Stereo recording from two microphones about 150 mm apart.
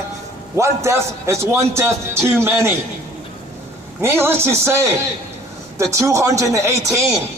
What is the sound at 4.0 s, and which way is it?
Speech, 15° right (ahead or behind).